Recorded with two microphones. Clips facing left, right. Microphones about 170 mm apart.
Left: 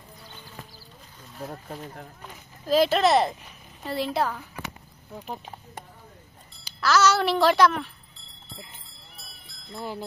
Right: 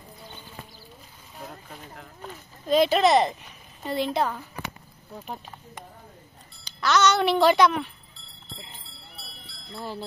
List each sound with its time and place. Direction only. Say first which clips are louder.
1.5 s speech: left 5 dB; 40° left (ahead or behind)
2.6 s speech: right 1 dB; centre (ahead or behind)
6.6 s speech: even; centre (ahead or behind)
9.7 s speech: left 1 dB; 15° left (ahead or behind)